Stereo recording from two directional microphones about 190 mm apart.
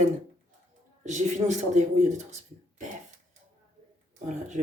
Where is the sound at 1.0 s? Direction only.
40° right (ahead or behind).